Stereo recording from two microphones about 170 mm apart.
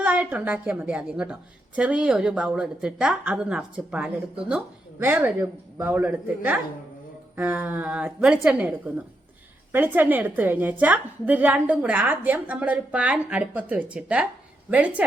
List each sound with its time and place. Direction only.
0.0 s a woman's voice: 10° right (ahead or behind)
9.7 s a woman's voice: 10° right (ahead or behind)